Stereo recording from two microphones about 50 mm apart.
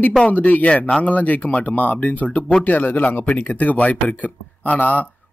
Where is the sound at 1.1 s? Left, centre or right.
Left.